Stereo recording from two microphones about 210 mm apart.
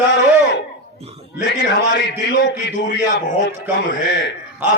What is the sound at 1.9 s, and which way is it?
Speech, 55° left (ahead or behind).